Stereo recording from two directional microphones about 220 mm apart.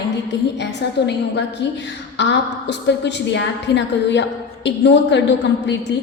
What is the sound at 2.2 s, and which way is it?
A woman's voice, 55° left (ahead or behind).